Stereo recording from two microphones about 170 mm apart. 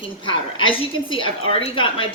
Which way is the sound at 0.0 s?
30° left (ahead or behind).